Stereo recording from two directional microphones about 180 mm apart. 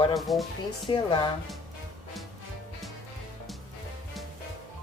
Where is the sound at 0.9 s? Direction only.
25° left (ahead or behind).